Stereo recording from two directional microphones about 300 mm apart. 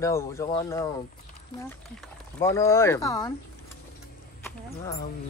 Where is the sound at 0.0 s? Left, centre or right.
Centre.